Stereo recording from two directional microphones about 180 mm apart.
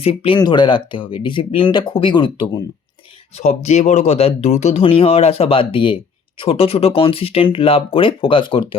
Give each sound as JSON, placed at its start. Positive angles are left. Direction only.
{"t": 0.0, "sound": "speech", "side_deg": 30}
{"t": 3.3, "sound": "speech", "side_deg": 35}